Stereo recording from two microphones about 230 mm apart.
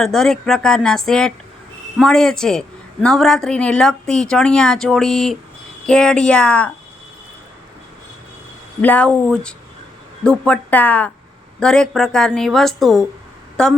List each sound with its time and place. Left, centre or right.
0.0 s a woman's voice: centre
8.8 s a woman's voice: centre